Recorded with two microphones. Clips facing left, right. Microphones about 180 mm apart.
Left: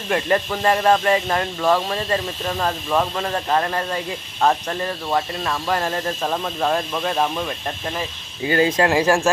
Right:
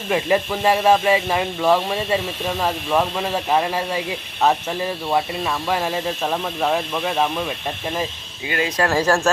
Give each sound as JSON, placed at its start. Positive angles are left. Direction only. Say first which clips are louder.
{"t": 0.1, "sound": "speech", "louder": "right 1 dB", "side_deg": -5}
{"t": 8.4, "sound": "speech", "louder": "left 6 dB", "side_deg": 35}
{"t": 8.8, "sound": "speech", "louder": "left 1 dB", "side_deg": 15}